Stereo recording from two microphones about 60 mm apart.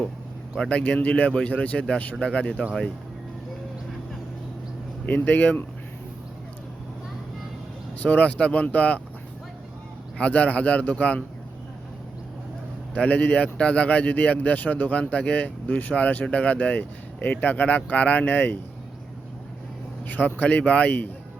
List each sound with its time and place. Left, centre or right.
0.6 s speech: left
5.0 s speech: left
8.0 s speech: left
10.2 s speech: left
12.9 s speech: left
20.1 s speech: left